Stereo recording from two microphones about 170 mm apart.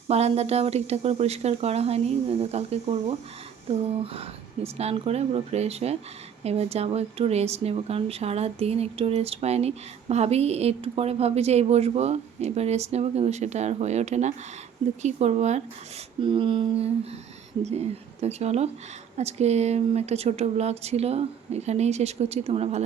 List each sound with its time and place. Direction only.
0.1 s speech: 40° right (ahead or behind)
16.2 s a sound: 30° right (ahead or behind)
17.6 s speech: 40° right (ahead or behind)